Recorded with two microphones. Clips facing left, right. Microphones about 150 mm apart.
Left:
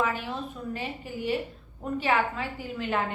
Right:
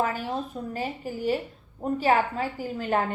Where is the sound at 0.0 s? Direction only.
40° right (ahead or behind).